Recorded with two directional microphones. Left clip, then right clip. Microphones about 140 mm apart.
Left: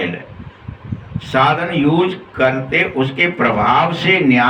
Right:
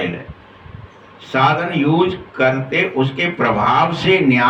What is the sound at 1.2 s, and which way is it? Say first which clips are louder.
Speech: left 1 dB; 15° left (ahead or behind).